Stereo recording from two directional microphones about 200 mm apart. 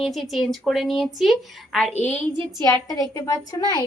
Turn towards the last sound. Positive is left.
turn(degrees=20)  # may be behind; listen again after turning